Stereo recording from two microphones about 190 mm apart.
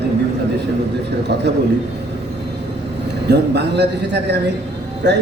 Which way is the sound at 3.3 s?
65° right (ahead or behind).